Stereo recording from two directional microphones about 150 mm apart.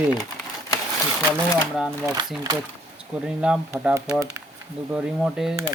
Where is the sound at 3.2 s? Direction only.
5° right (ahead or behind).